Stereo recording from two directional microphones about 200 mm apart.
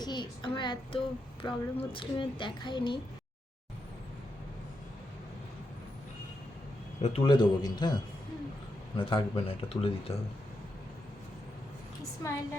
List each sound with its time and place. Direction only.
0.0 s speech: 20° left (ahead or behind)
7.0 s speech: 25° left (ahead or behind)